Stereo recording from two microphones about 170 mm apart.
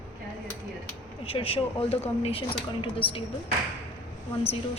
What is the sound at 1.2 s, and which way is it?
Speech, 30° left (ahead or behind).